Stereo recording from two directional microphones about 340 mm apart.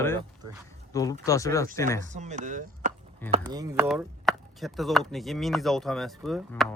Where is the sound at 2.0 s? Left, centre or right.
Right.